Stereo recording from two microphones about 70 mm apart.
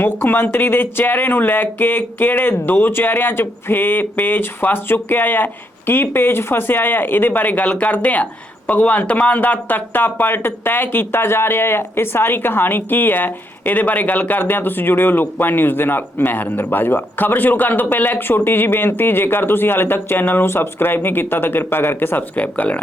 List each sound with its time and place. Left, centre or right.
0.0 s speech: left